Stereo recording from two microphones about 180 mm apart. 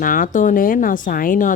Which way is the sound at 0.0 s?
50° left (ahead or behind).